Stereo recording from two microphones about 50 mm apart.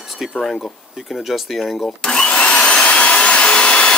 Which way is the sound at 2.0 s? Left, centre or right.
Centre.